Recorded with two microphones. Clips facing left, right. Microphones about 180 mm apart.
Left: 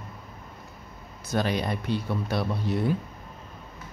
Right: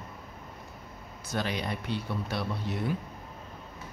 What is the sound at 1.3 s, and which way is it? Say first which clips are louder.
Speech: left 5 dB; 40° left (ahead or behind).